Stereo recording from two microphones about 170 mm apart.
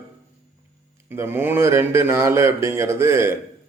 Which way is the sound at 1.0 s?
15° right (ahead or behind).